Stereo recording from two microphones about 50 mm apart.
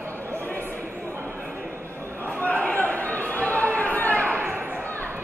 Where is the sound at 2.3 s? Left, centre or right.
Left.